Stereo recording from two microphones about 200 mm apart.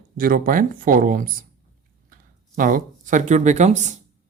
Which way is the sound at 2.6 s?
40° right (ahead or behind).